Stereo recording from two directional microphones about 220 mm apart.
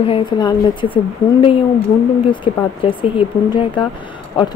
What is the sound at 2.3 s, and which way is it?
Speech, 25° left (ahead or behind).